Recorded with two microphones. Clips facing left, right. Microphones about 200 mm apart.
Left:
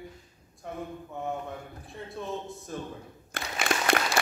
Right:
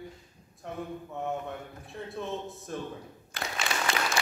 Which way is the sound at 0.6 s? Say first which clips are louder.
Even; centre (ahead or behind).